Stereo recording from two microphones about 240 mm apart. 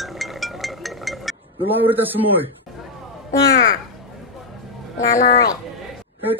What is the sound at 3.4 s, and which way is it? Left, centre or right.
Speech, left.